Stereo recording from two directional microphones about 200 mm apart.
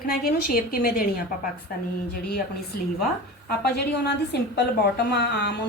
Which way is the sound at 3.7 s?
55° left (ahead or behind).